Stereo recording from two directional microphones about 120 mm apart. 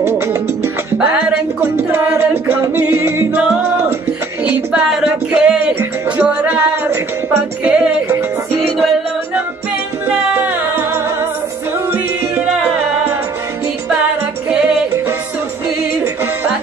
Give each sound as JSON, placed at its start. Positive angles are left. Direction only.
{"t": 1.6, "sound": "music", "side_deg": -20}
{"t": 5.3, "sound": "music", "side_deg": -10}